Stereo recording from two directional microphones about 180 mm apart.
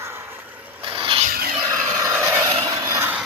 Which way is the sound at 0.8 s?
30° right (ahead or behind).